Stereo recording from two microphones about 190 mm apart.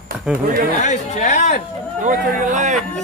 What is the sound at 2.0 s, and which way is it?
Speech, 40° right (ahead or behind).